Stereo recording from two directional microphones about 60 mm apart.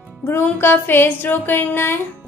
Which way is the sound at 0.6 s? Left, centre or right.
Left.